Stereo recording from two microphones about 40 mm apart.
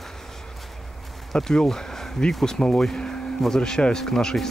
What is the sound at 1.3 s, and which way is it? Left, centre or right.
Speech, centre.